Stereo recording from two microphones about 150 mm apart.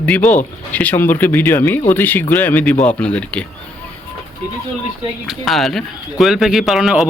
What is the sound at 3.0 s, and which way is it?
Speech, 5° left (ahead or behind).